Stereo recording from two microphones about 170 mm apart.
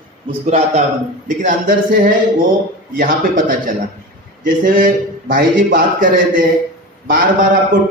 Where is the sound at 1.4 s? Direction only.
55° right (ahead or behind).